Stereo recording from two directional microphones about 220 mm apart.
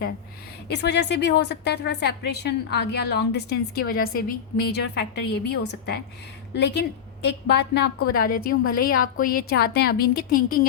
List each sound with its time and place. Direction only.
0.7 s a woman's voice: 50° left (ahead or behind)